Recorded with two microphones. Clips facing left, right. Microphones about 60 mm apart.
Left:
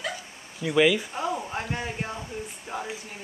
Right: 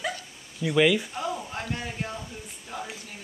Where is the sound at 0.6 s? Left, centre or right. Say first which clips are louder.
Even; centre.